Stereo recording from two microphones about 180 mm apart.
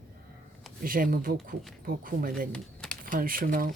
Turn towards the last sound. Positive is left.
turn(degrees=-50)  # may be behind; listen again after turning